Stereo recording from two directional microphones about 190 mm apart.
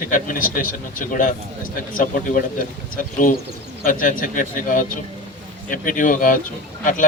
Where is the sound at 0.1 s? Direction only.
45° left (ahead or behind).